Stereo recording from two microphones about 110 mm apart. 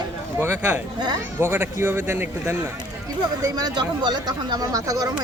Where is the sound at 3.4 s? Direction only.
35° right (ahead or behind).